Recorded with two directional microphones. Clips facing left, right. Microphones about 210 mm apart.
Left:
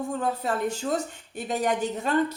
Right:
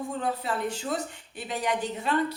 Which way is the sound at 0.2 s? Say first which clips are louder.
Left 2 dB; 45° left (ahead or behind).